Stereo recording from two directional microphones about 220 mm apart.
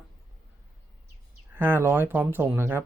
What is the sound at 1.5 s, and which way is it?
Speech, 10° right (ahead or behind).